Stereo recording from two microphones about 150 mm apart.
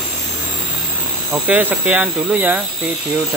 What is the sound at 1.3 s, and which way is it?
Speech, 10° right (ahead or behind).